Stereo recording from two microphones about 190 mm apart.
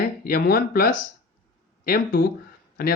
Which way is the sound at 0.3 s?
55° left (ahead or behind).